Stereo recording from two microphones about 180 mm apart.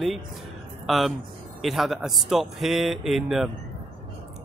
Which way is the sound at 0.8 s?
Centre (ahead or behind).